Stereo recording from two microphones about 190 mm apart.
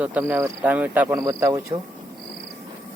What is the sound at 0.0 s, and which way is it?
Speech, 10° right (ahead or behind).